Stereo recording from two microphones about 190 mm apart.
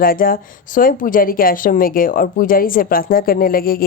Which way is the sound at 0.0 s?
50° left (ahead or behind).